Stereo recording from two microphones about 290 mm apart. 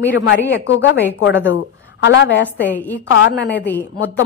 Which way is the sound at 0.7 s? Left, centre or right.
Left.